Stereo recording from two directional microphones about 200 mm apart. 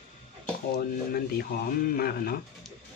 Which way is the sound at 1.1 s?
45° left (ahead or behind).